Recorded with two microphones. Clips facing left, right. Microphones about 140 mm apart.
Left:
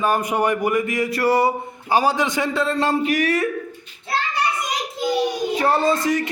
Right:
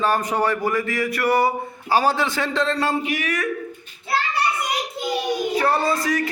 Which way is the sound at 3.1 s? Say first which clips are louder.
Left 5 dB; 35° left (ahead or behind).